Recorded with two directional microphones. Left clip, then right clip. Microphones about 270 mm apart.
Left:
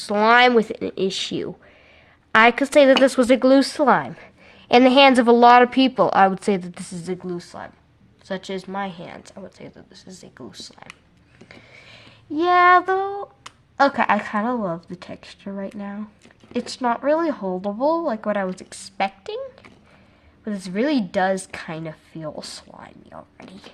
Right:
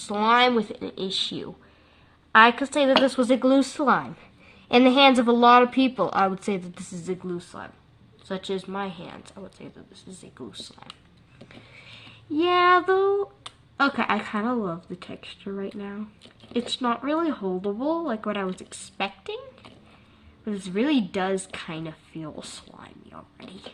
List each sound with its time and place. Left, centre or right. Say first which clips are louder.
0.0 s speech: left 5 dB; left
11.4 s a sound: left 2 dB; left
13.8 s speech: left 6 dB; left
20.4 s speech: left 3 dB; left